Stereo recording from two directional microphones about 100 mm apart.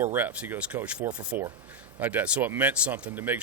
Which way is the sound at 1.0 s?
45° right (ahead or behind).